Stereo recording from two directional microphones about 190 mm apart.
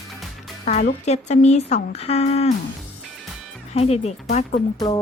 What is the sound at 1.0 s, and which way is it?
Speech, 35° left (ahead or behind).